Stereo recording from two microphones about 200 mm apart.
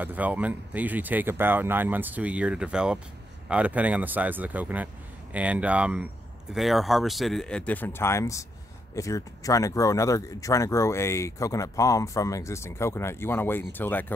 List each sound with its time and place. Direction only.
0.0 s speech: 10° right (ahead or behind); by 14.1 s 10° left (ahead or behind)